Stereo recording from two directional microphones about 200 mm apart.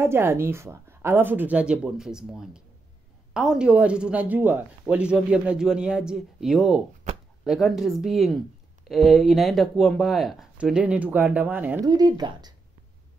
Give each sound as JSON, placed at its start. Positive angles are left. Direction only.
{"t": 0.0, "sound": "a woman's voice", "side_deg": -10}
{"t": 11.8, "sound": "speech", "side_deg": -20}